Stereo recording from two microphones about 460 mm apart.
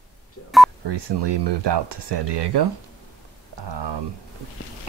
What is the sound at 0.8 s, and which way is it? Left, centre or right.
Speech, right.